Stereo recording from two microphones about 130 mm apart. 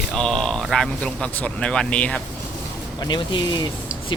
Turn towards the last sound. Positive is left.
turn(degrees=35)  # may be behind; listen again after turning